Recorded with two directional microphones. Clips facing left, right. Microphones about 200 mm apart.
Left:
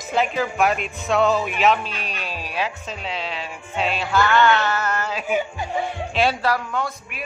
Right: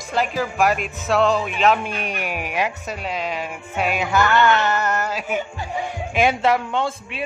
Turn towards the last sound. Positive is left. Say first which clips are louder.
# right 3 dB
turn(degrees=-25)  # may be behind; listen again after turning